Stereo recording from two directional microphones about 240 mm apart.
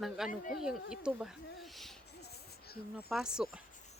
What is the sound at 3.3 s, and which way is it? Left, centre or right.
Speech, centre.